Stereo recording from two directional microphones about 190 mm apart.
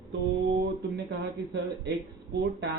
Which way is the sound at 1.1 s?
65° right (ahead or behind).